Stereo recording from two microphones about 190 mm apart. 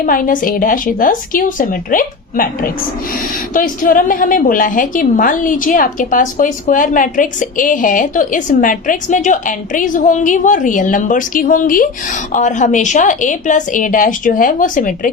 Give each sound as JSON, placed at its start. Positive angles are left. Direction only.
{"t": 0.0, "sound": "a woman's voice", "side_deg": 45}